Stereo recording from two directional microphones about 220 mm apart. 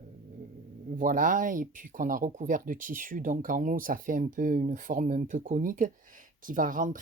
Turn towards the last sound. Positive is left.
turn(degrees=-35)  # may be behind; listen again after turning